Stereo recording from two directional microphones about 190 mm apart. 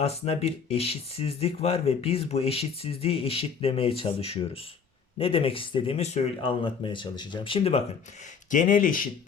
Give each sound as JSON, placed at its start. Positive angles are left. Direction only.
{"t": 0.0, "sound": "speech", "side_deg": 30}
{"t": 8.4, "sound": "speech", "side_deg": 45}